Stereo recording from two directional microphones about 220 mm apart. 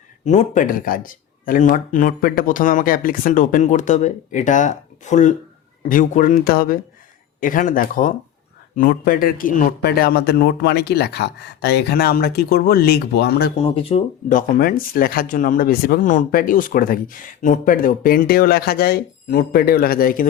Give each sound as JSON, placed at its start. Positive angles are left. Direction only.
{"t": 0.3, "sound": "speech", "side_deg": 35}
{"t": 13.6, "sound": "speech", "side_deg": 25}